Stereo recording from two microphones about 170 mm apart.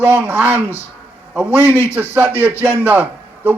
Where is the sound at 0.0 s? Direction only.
15° right (ahead or behind).